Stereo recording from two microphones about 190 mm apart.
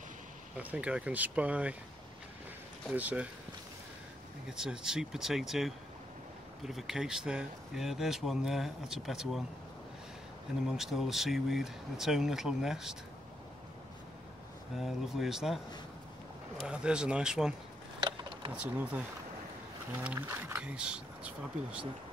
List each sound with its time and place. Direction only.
0.6 s speech: 5° right (ahead or behind)
2.9 s speech: 10° right (ahead or behind)
4.5 s speech: 5° right (ahead or behind)
10.7 s speech: centre (ahead or behind)
14.8 s speech: centre (ahead or behind)
18.0 s a sound: 25° right (ahead or behind)
18.6 s speech: 5° right (ahead or behind)